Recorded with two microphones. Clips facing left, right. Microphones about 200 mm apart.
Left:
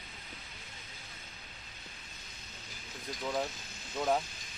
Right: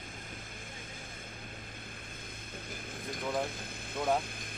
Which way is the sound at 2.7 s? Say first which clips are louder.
Right 2 dB; 55° right (ahead or behind).